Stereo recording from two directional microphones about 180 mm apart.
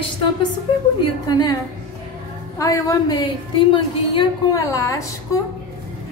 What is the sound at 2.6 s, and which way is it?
A woman's voice, 20° left (ahead or behind).